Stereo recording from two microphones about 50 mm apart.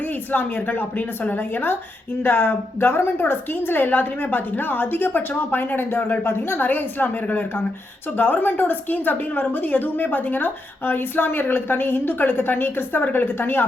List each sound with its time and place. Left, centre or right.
0.3 s a woman's voice: left